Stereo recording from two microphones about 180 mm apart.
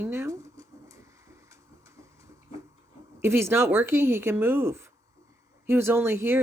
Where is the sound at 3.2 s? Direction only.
15° right (ahead or behind).